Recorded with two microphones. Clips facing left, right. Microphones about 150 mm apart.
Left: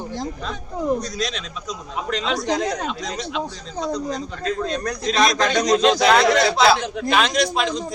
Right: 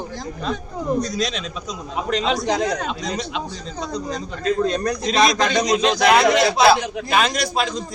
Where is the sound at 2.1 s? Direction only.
15° right (ahead or behind).